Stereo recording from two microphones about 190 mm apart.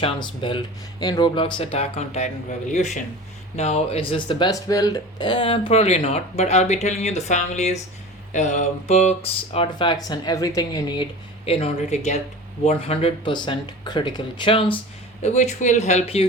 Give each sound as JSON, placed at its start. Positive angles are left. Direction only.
{"t": 0.0, "sound": "speech", "side_deg": 25}
{"t": 15.2, "sound": "speech", "side_deg": 40}